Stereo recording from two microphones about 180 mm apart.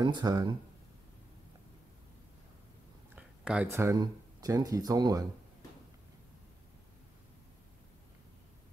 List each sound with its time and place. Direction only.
0.0 s speech: 20° right (ahead or behind)
3.2 s speech: 5° right (ahead or behind)